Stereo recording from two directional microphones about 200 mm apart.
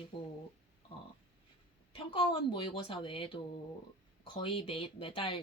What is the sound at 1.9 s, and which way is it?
Speech, 25° left (ahead or behind).